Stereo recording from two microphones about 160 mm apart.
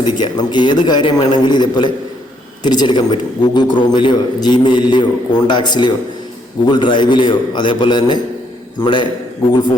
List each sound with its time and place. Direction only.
0.0 s a man's voice: 30° left (ahead or behind)